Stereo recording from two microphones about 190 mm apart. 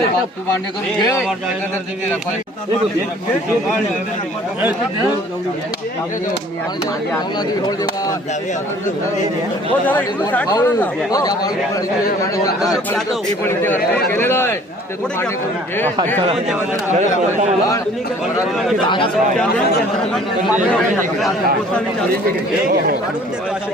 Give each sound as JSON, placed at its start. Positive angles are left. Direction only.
{"t": 9.8, "sound": "speech", "side_deg": 10}
{"t": 12.6, "sound": "speech", "side_deg": 20}
{"t": 18.9, "sound": "speech", "side_deg": 25}